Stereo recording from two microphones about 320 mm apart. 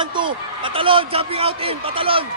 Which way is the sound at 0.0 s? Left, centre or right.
Centre.